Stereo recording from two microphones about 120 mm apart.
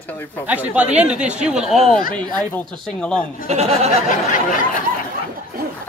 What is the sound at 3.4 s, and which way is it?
Speech, 65° right (ahead or behind).